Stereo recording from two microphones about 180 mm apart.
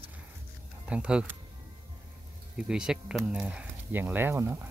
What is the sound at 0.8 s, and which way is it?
Speech, 5° right (ahead or behind).